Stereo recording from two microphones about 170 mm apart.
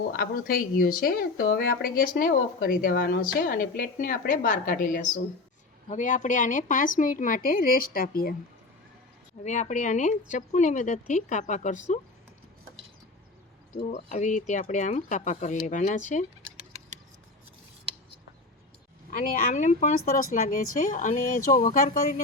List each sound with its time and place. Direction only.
0.2 s speech: 60° left (ahead or behind)
9.4 s speech: 45° left (ahead or behind)
13.9 s speech: 45° left (ahead or behind)
16.6 s rodents: 40° right (ahead or behind)
19.1 s speech: 50° left (ahead or behind)
20.1 s speech: 55° left (ahead or behind)